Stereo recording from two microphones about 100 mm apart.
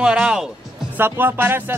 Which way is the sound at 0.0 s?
10° right (ahead or behind).